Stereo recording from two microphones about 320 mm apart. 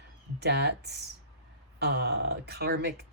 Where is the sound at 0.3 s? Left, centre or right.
Right.